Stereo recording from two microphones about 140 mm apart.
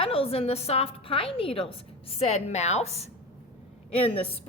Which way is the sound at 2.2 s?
55° left (ahead or behind).